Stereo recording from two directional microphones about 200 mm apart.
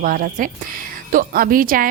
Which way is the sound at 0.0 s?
45° right (ahead or behind).